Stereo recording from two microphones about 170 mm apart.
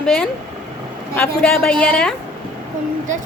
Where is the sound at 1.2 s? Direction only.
10° left (ahead or behind).